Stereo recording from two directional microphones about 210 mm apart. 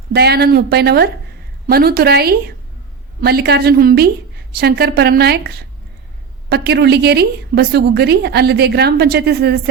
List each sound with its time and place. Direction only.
0.1 s a woman's voice: 50° right (ahead or behind)